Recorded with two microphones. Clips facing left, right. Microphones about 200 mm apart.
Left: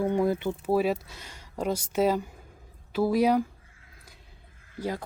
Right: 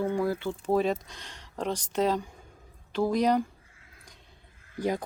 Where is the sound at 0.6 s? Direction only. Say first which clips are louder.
Even; 5° left (ahead or behind).